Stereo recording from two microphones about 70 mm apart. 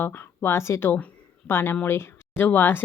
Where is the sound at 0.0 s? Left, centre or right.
Left.